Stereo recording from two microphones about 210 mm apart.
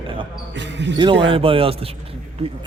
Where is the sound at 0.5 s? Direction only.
55° right (ahead or behind).